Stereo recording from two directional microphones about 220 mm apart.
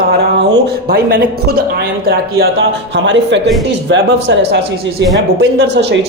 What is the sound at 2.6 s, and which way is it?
A woman's voice, 55° right (ahead or behind).